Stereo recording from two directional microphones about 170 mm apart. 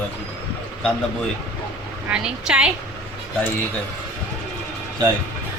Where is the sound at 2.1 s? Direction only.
5° right (ahead or behind).